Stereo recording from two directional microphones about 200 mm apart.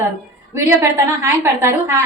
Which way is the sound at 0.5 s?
15° right (ahead or behind).